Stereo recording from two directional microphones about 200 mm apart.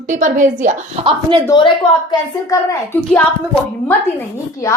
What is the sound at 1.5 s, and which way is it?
A woman's voice, 20° left (ahead or behind).